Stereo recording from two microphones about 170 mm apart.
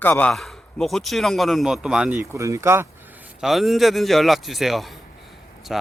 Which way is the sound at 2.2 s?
20° right (ahead or behind).